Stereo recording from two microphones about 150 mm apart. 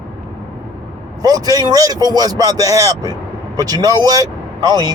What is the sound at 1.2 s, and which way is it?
Speech, 25° right (ahead or behind).